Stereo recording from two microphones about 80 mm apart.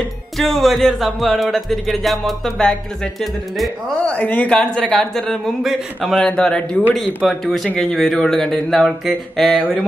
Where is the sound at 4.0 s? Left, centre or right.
Centre.